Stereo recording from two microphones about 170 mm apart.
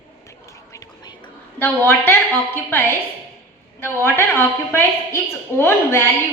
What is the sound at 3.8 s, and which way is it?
A woman's voice, 15° left (ahead or behind).